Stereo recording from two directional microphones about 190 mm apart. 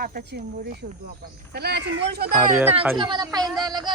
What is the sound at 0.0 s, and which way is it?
Speech, 55° right (ahead or behind).